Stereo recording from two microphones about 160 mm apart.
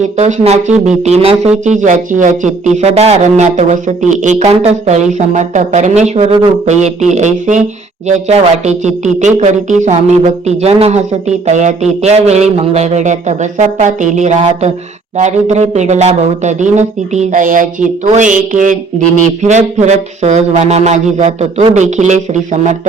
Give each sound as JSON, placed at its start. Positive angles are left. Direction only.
{"t": 0.0, "sound": "speech", "side_deg": -45}